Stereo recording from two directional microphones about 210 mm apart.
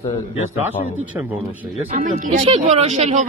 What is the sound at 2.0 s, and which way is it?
Speech, 35° right (ahead or behind).